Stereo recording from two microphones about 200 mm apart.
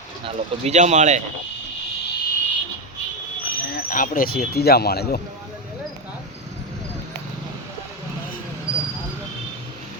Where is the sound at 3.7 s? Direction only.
45° left (ahead or behind).